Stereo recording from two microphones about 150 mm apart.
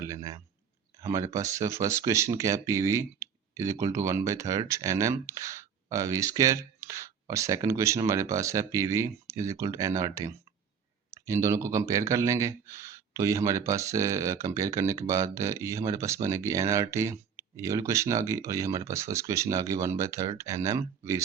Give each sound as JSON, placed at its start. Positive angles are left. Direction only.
{"t": 0.0, "sound": "speech", "side_deg": -20}